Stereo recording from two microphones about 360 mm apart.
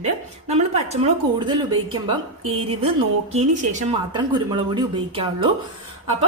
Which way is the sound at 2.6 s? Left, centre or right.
Centre.